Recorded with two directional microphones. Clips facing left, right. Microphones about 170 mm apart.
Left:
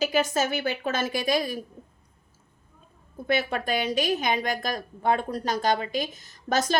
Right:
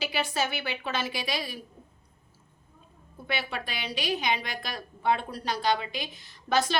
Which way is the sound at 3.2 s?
45° left (ahead or behind).